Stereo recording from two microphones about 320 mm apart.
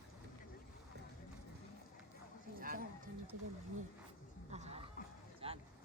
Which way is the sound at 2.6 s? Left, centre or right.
Right.